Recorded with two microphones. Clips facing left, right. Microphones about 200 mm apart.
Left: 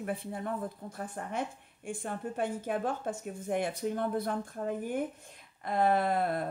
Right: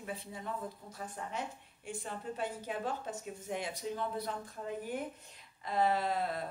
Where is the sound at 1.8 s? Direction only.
55° left (ahead or behind).